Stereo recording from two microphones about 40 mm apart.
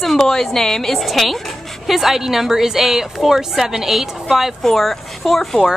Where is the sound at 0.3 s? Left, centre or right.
Centre.